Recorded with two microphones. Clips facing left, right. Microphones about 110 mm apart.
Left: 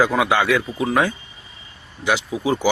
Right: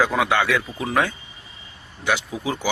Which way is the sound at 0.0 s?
5° left (ahead or behind).